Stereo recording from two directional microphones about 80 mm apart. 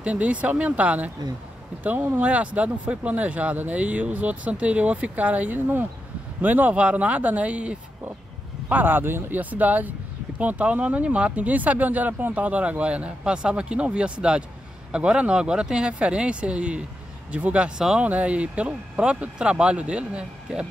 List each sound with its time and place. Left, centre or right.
0.0 s speech: centre